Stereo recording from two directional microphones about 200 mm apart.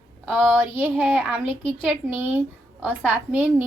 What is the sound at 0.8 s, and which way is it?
Speech, 10° right (ahead or behind).